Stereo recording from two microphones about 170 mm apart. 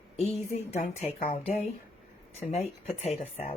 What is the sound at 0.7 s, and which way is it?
Speech, 40° left (ahead or behind).